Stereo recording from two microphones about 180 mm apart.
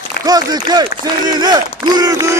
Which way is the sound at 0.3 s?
20° right (ahead or behind).